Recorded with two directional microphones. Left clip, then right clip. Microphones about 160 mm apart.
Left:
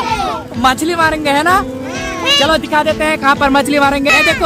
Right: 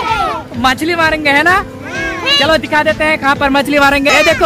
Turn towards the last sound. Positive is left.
turn(degrees=0)  # may be behind; listen again after turning